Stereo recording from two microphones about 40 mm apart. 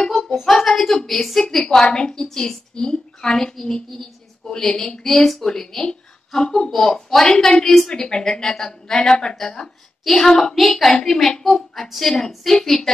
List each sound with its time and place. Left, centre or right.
0.4 s a woman's voice: centre
5.0 s a woman's voice: centre